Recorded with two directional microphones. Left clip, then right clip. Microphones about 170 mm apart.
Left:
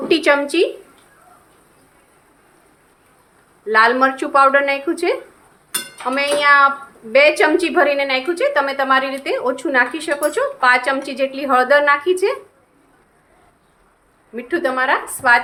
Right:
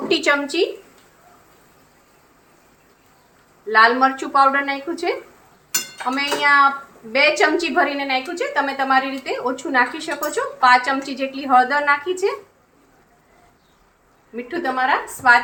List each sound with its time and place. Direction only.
0.1 s a woman's voice: 20° left (ahead or behind)
3.7 s a woman's voice: 25° left (ahead or behind)
14.3 s a woman's voice: 25° left (ahead or behind)